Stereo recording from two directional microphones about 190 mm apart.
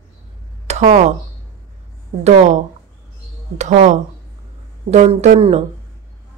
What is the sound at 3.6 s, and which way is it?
Speech, 40° right (ahead or behind).